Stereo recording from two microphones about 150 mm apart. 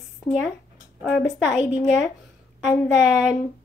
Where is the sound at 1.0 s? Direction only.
Centre (ahead or behind).